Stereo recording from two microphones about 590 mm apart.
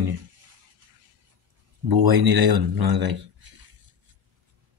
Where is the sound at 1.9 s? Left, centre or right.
Right.